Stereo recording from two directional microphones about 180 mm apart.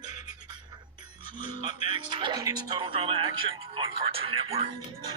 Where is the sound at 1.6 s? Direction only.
25° right (ahead or behind).